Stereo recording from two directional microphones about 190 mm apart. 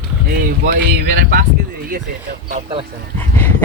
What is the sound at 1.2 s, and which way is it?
Speech, 50° right (ahead or behind).